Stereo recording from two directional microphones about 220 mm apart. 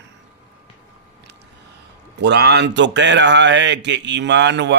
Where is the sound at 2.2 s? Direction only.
50° right (ahead or behind).